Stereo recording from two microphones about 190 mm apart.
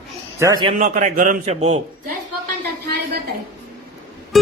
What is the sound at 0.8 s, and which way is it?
A man's voice, 40° right (ahead or behind).